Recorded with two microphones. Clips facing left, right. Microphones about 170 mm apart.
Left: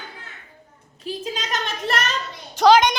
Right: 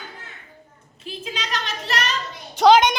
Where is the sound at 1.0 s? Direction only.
40° left (ahead or behind).